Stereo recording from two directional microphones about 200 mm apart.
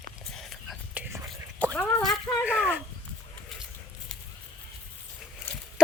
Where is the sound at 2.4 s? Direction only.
5° right (ahead or behind).